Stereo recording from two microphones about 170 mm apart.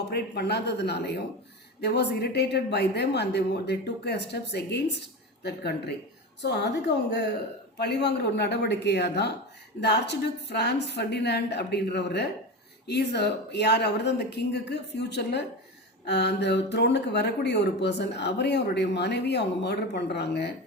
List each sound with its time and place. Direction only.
0.1 s a woman's voice: 75° left (ahead or behind)